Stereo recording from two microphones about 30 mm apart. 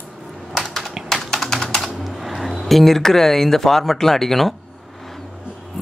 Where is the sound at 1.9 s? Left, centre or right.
Centre.